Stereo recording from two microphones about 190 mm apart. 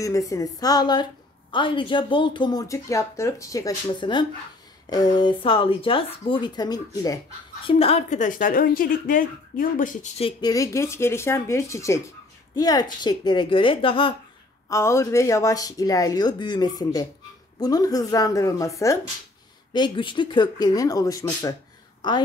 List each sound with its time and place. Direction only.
0.0 s speech: 15° left (ahead or behind)
7.6 s speech: 30° left (ahead or behind)
10.2 s speech: 20° left (ahead or behind)
14.7 s speech: 15° left (ahead or behind)
19.7 s speech: 25° left (ahead or behind)